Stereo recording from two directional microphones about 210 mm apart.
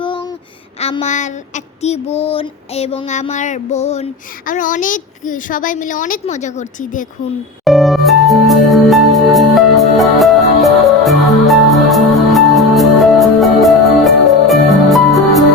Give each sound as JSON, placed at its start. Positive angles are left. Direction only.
{"t": 0.0, "sound": "a sound", "side_deg": 25}
{"t": 0.8, "sound": "child singing", "side_deg": 30}
{"t": 7.6, "sound": "music", "side_deg": 0}